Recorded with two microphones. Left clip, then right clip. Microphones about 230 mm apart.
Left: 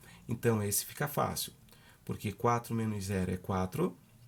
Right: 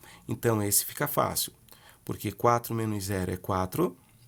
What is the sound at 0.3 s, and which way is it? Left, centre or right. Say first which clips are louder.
Speech: right 4 dB; right.